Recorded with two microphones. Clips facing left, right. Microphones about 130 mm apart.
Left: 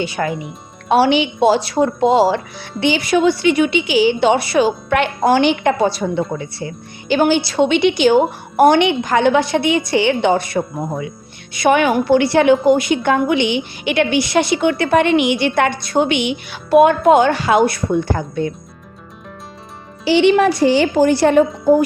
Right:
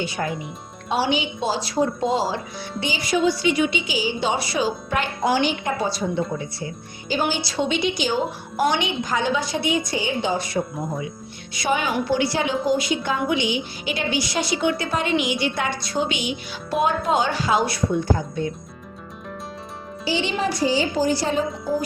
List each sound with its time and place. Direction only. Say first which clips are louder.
0.0 s a woman's voice: left 5 dB; 80° left
20.1 s a woman's voice: left 12 dB; 70° left (ahead or behind)